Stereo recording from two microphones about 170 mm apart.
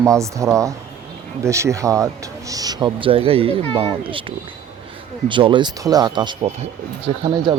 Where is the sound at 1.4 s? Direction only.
15° right (ahead or behind).